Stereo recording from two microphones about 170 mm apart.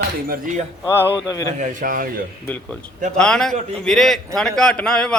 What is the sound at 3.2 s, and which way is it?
A man's voice, 5° left (ahead or behind).